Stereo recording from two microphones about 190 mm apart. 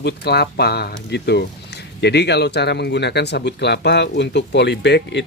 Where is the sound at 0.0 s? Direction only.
60° left (ahead or behind).